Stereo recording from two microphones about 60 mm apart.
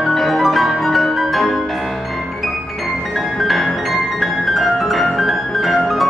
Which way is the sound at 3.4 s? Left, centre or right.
Centre.